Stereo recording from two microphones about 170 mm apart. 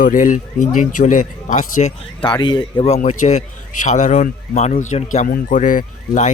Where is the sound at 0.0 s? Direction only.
50° left (ahead or behind).